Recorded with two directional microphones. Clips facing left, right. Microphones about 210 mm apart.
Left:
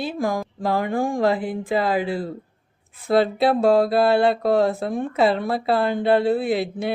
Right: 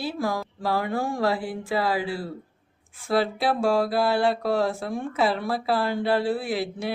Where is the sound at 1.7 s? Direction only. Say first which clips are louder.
Left 4 dB; 20° left (ahead or behind).